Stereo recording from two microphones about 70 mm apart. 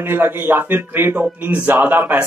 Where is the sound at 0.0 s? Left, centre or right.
Right.